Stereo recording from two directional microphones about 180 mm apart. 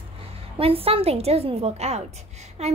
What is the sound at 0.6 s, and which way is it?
A woman's voice, 30° right (ahead or behind).